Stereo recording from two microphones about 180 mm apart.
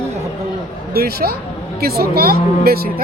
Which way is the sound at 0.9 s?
60° right (ahead or behind).